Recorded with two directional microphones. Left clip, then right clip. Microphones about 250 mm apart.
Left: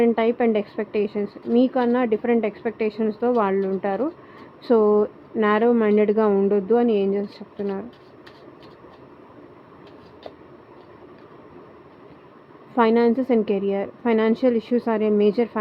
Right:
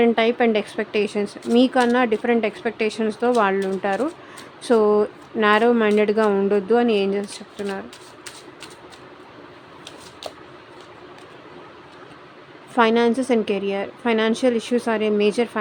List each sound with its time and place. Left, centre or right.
0.0 s speech: centre
12.7 s a woman's voice: centre